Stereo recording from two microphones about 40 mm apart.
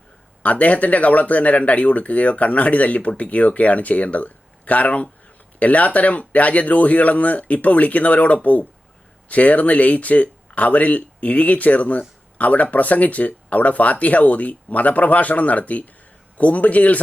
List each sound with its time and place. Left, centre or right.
0.4 s speech: left